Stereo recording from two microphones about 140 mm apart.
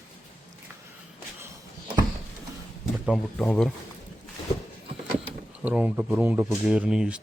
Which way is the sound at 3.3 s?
5° left (ahead or behind).